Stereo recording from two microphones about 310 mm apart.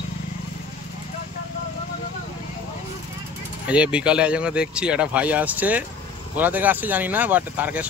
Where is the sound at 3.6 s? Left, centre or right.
Centre.